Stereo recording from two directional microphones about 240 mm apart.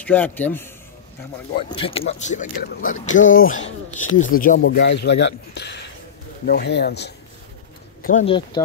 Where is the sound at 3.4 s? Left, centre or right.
Left.